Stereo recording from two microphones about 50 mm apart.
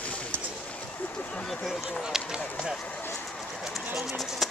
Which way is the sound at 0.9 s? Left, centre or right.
Left.